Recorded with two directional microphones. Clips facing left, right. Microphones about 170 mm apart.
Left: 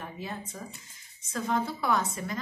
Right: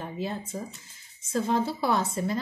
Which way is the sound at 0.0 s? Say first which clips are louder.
Right 5 dB; 25° right (ahead or behind).